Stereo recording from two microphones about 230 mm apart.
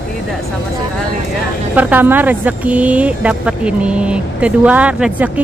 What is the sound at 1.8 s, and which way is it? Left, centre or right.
Speech, centre.